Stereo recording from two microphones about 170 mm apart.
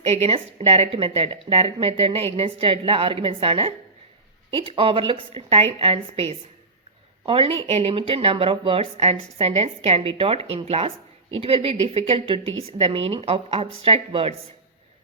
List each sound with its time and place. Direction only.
0.0 s a woman's voice: 35° right (ahead or behind)